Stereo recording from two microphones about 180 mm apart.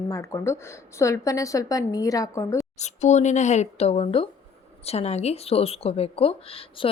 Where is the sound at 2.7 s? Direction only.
40° left (ahead or behind).